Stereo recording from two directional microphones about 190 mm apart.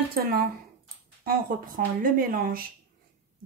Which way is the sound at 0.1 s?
50° right (ahead or behind).